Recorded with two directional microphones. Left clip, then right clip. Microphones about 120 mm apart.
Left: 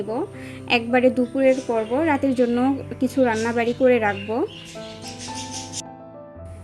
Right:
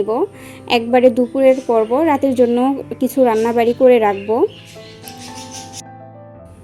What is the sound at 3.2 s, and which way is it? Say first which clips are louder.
Speech: right 7 dB; 40° right (ahead or behind).